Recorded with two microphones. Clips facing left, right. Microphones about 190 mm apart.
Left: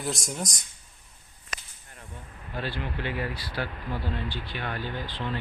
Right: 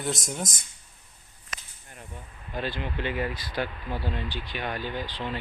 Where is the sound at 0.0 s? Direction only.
Centre (ahead or behind).